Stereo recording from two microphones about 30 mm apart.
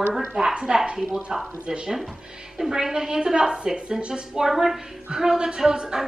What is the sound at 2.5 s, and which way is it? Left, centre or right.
A woman's voice, centre.